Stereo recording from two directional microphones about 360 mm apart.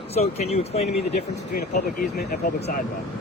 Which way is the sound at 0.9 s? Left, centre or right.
Left.